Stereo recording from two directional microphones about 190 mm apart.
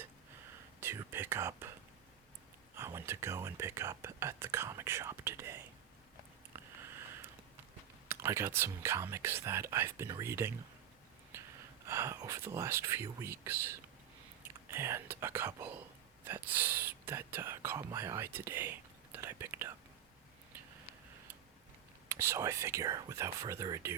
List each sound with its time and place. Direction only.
0.8 s whispering: 10° right (ahead or behind)
2.7 s speech: 10° right (ahead or behind)
6.5 s a sound: 10° right (ahead or behind)
8.0 s speech: 15° right (ahead or behind)
11.9 s speech: 15° right (ahead or behind)
22.1 s speech: 15° right (ahead or behind)